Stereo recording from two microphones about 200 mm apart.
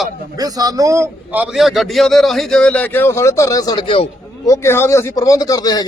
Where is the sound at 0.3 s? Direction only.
20° right (ahead or behind); by 4.1 s 25° left (ahead or behind).